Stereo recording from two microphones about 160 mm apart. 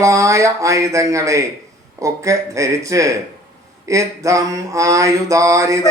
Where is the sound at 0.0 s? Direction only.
20° right (ahead or behind).